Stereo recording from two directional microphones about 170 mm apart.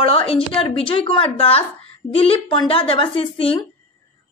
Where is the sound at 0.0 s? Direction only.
35° left (ahead or behind).